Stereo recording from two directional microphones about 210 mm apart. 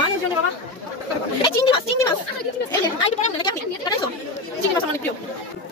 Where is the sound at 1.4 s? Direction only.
20° left (ahead or behind).